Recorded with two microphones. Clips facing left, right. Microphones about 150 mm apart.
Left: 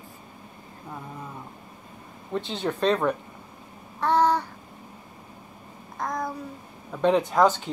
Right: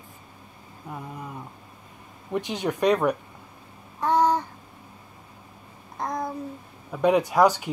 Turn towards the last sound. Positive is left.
turn(degrees=-10)  # may be behind; listen again after turning